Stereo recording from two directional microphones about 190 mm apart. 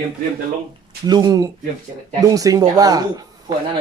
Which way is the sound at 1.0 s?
20° right (ahead or behind).